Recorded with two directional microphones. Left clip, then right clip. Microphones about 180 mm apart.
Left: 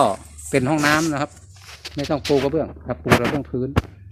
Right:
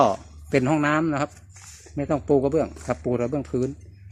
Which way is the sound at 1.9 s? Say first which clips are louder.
Left 2 dB; 10° right (ahead or behind).